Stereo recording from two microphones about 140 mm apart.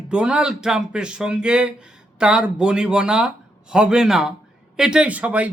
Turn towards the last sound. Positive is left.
turn(degrees=-10)  # may be behind; listen again after turning